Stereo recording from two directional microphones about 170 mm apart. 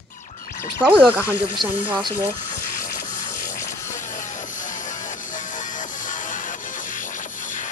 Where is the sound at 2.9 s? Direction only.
45° left (ahead or behind).